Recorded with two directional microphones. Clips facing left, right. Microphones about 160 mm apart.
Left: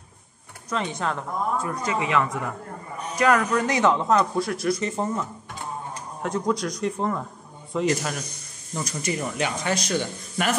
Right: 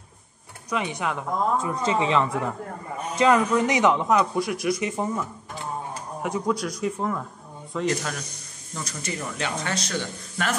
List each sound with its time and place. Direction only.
0.7 s speech: 15° right (ahead or behind); by 2.3 s 30° right (ahead or behind)
3.2 s speech: 20° right (ahead or behind); by 10.5 s 15° left (ahead or behind)